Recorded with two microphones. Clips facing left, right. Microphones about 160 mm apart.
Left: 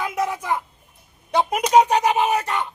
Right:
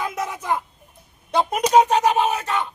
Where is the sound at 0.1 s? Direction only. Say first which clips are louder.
Left 2 dB; 10° left (ahead or behind).